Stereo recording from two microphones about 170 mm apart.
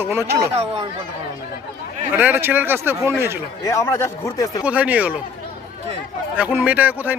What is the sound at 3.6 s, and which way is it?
Speech, 15° left (ahead or behind).